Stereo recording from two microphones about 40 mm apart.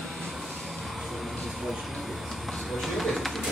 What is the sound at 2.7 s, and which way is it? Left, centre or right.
Pigeon, centre.